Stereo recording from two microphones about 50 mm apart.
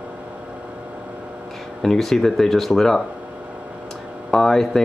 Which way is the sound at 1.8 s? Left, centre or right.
Centre.